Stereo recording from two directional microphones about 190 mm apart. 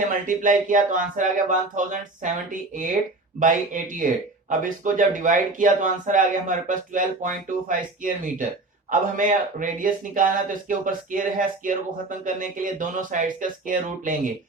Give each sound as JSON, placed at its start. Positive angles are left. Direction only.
{"t": 0.1, "sound": "speech", "side_deg": -45}